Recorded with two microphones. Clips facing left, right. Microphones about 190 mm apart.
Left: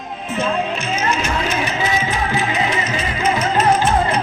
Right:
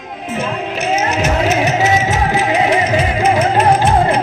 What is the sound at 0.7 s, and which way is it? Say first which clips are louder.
Music: right 5 dB; 70° right (ahead or behind).